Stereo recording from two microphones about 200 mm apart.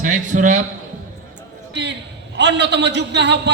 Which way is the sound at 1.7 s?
60° right (ahead or behind).